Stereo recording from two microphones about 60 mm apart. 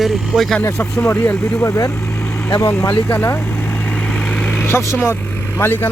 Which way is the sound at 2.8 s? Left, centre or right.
Left.